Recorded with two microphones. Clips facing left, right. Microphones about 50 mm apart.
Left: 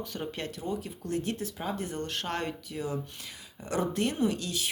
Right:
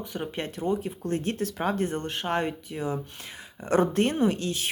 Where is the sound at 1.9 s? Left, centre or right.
Right.